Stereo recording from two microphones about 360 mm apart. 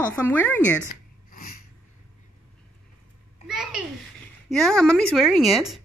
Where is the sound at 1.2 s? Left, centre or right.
Left.